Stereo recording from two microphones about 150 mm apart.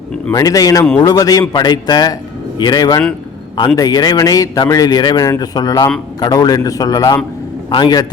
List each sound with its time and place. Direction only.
0.3 s a man's voice: 25° left (ahead or behind)